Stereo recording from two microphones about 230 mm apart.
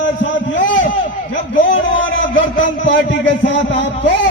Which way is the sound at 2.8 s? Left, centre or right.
Left.